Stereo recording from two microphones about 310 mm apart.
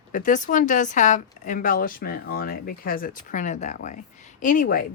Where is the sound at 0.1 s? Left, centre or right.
Left.